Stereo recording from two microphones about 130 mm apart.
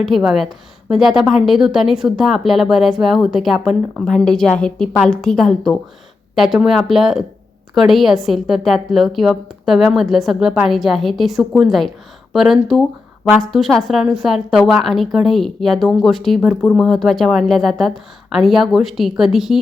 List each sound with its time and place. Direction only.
0.0 s a woman's voice: centre (ahead or behind)